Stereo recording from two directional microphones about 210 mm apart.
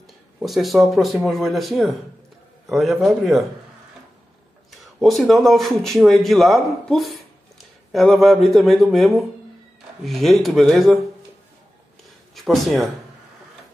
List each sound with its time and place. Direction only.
0.0 s a man's voice: centre (ahead or behind)
5.0 s a man's voice: centre (ahead or behind)
12.4 s speech: centre (ahead or behind)